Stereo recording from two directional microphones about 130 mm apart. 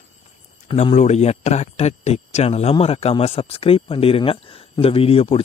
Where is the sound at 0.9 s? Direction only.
60° left (ahead or behind).